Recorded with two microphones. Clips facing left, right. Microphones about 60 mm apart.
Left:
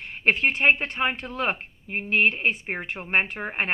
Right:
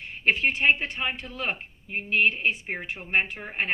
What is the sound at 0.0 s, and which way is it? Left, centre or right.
A woman's voice, left.